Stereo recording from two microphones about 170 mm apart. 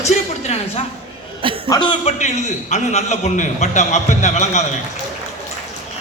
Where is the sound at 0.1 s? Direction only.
40° left (ahead or behind).